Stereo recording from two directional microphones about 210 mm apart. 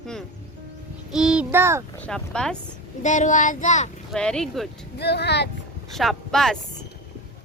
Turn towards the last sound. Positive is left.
turn(degrees=0)  # may be behind; listen again after turning